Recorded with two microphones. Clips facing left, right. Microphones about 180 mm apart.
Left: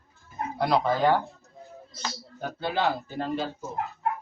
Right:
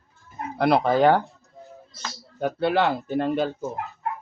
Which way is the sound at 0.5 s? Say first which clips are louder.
Right 5 dB; 65° right (ahead or behind).